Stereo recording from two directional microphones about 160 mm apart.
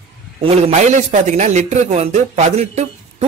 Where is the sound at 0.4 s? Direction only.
40° right (ahead or behind).